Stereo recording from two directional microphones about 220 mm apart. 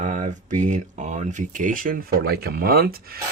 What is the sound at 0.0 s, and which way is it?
Speech, 35° right (ahead or behind).